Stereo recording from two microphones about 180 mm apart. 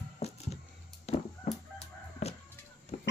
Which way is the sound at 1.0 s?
35° left (ahead or behind).